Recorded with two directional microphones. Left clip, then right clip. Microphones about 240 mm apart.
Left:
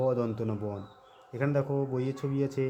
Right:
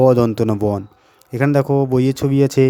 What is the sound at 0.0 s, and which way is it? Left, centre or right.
Speech, right.